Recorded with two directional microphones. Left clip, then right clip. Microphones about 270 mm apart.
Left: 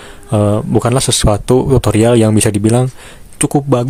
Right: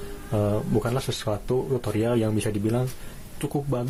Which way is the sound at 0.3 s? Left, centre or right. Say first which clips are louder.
Left 12 dB; left.